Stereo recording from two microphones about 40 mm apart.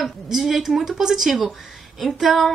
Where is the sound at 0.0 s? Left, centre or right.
Centre.